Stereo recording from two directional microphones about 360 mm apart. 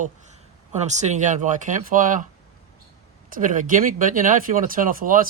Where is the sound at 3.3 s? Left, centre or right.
Right.